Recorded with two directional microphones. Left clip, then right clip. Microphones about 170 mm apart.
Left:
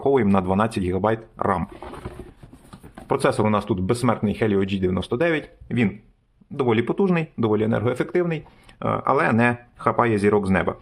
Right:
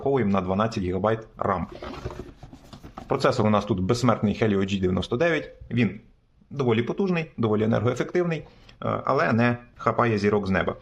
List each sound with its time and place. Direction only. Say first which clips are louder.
0.0 s speech: left 4 dB; 25° left (ahead or behind)
3.1 s speech: left 2 dB; 15° left (ahead or behind)
5.6 s speech: left 2 dB; 25° left (ahead or behind)
8.8 s speech: left 3 dB; 25° left (ahead or behind)